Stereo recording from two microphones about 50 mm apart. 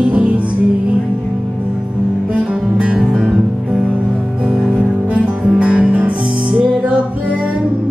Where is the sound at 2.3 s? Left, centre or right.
Right.